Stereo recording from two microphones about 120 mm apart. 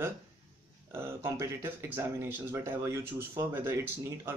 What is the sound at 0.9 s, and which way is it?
Speech, 20° right (ahead or behind).